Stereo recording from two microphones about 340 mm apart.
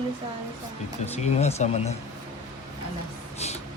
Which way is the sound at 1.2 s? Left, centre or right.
Centre.